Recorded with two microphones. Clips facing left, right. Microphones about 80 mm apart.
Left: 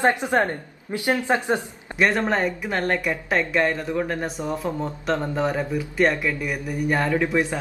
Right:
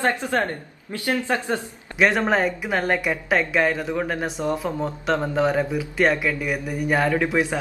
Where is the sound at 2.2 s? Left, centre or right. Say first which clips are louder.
Right 2 dB; centre.